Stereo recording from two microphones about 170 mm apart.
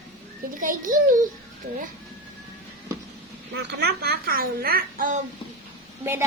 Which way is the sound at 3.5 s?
80° right.